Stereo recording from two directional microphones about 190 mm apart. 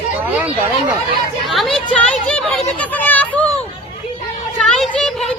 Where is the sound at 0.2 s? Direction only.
10° right (ahead or behind).